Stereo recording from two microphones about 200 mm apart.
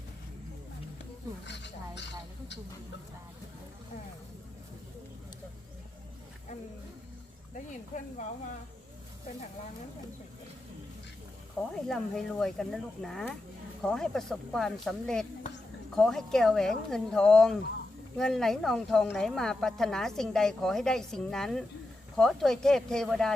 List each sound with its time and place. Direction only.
1.5 s speech: 60° left (ahead or behind)
7.5 s speech: 40° left (ahead or behind)
11.9 s a woman's voice: centre (ahead or behind)